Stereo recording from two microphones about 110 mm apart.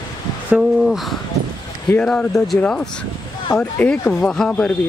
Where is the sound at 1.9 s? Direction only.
10° left (ahead or behind).